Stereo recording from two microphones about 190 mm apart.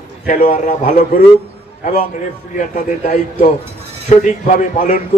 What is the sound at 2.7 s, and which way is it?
A man's voice, 45° left (ahead or behind).